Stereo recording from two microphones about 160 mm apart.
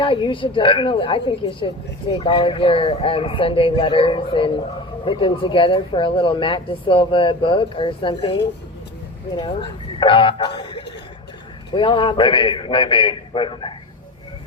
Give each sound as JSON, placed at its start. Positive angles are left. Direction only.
{"t": 0.0, "sound": "speech", "side_deg": 30}